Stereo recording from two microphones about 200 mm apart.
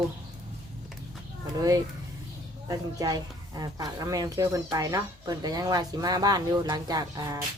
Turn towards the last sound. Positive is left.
turn(degrees=-20)  # may be behind; listen again after turning